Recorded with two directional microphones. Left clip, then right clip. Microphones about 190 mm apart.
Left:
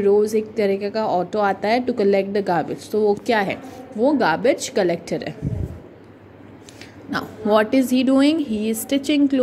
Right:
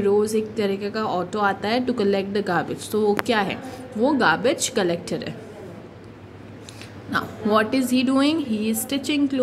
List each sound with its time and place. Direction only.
0.0 s speech: 15° left (ahead or behind)
7.1 s speech: 25° left (ahead or behind)